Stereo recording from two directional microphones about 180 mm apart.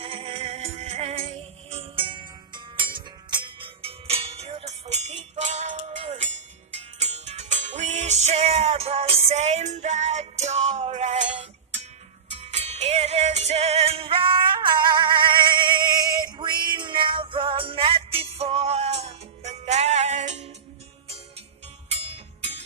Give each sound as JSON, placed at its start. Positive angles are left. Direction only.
{"t": 0.0, "sound": "music", "side_deg": -30}
{"t": 22.0, "sound": "music", "side_deg": -35}